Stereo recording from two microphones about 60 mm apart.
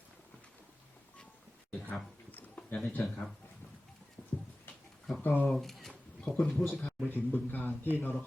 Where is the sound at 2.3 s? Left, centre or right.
Left.